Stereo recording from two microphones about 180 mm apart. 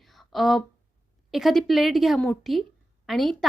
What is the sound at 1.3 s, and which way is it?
A woman's voice, centre (ahead or behind).